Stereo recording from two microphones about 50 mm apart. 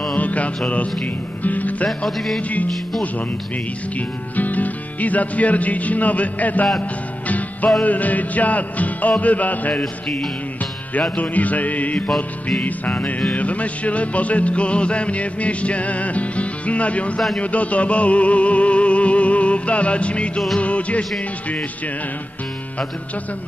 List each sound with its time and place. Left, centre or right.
0.1 s music: left
1.9 s music: centre
4.4 s music: left